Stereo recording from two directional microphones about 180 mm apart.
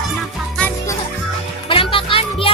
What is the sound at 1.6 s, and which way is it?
Music, 30° left (ahead or behind).